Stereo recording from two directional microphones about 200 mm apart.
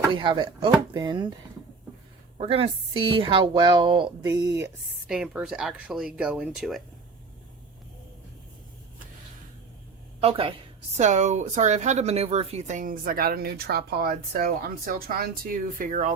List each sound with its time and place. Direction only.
0.1 s a woman's voice: 25° right (ahead or behind)
2.4 s a woman's voice: 30° right (ahead or behind)
5.0 s speech: 5° right (ahead or behind)
10.2 s speech: 30° right (ahead or behind)